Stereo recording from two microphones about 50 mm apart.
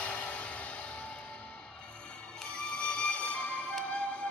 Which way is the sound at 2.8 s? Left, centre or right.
Left.